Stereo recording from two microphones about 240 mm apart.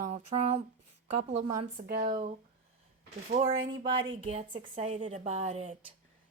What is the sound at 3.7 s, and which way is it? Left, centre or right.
A woman's voice, right.